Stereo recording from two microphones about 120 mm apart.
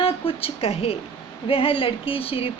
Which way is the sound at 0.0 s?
50° left (ahead or behind).